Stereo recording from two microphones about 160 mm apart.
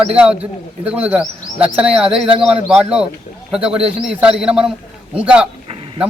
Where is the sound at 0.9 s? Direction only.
10° right (ahead or behind).